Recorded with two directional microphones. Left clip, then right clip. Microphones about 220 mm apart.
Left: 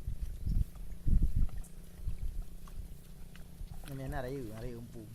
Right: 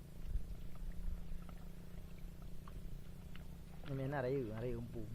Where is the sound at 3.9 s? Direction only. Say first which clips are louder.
Right 1 dB; 35° right (ahead or behind).